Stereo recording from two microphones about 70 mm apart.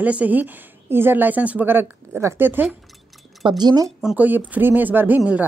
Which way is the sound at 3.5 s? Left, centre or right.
Right.